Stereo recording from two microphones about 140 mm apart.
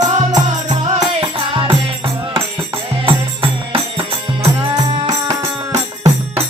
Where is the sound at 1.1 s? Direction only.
40° right (ahead or behind).